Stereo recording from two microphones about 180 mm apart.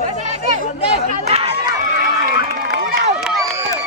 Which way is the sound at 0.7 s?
35° left (ahead or behind).